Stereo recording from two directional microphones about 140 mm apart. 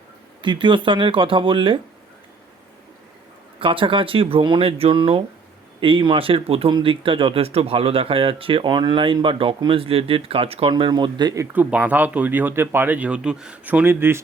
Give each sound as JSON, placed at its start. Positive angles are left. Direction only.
{"t": 0.4, "sound": "speech", "side_deg": -35}
{"t": 3.6, "sound": "speech", "side_deg": -40}
{"t": 11.5, "sound": "speech", "side_deg": -10}